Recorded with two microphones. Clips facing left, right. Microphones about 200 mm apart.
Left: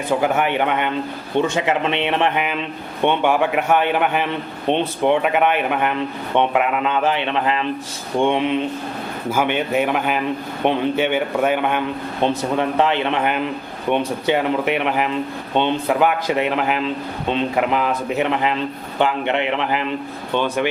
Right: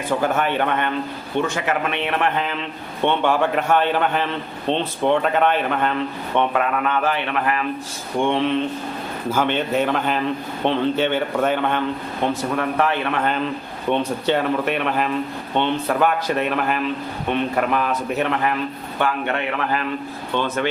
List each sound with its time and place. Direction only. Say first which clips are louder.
0.2 s a man's voice: left 2 dB; 15° left (ahead or behind)